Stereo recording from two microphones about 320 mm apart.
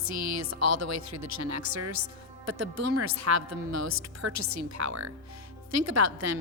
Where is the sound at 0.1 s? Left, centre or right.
Right.